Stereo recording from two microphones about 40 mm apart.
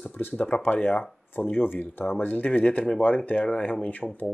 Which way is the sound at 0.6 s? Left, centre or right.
Left.